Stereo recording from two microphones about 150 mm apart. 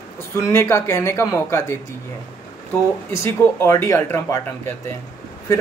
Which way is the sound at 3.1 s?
20° left (ahead or behind).